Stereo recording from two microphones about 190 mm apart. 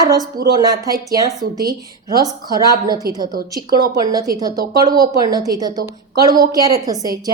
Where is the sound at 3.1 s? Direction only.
50° right (ahead or behind).